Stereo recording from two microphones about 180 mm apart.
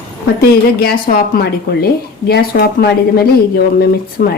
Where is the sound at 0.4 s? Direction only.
55° left (ahead or behind).